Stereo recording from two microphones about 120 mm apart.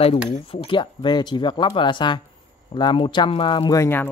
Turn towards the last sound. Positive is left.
turn(degrees=20)  # may be behind; listen again after turning